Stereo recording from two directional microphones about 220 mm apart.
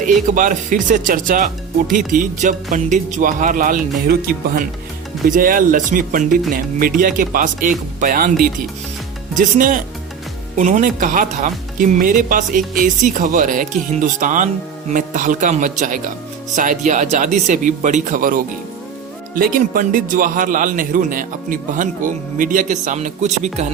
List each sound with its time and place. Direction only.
0.0 s speech: 35° right (ahead or behind)